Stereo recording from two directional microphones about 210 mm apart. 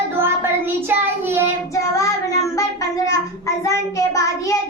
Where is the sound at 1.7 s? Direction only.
15° left (ahead or behind).